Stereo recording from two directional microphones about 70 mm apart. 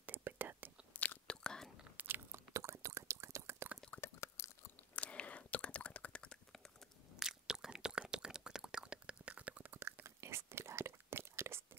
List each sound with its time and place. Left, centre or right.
0.0 s whispering: right
0.9 s chewing: left
2.0 s chewing: right
4.0 s chewing: left
4.9 s whispering: centre
7.2 s chewing: centre; by 10.0 s right
10.0 s whispering: right